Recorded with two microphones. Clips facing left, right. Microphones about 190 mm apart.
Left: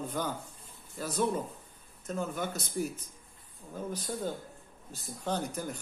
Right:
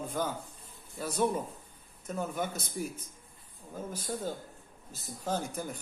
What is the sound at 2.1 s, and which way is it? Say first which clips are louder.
Speech: even; 10° right (ahead or behind).